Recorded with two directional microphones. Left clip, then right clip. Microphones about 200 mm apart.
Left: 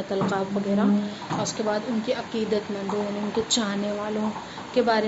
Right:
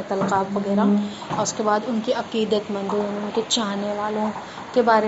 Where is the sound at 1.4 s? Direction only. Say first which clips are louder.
Right 6 dB; 5° right (ahead or behind).